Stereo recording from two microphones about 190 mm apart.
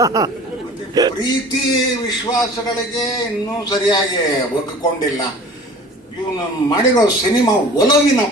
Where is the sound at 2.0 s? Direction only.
20° left (ahead or behind).